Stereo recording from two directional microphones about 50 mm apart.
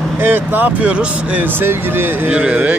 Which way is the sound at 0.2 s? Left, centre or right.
Right.